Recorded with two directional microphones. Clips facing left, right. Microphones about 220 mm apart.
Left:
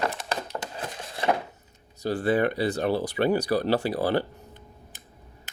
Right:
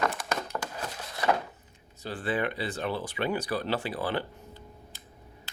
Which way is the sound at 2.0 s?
40° left (ahead or behind).